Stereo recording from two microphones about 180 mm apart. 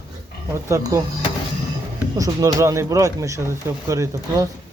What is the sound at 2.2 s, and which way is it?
Speech, 20° right (ahead or behind).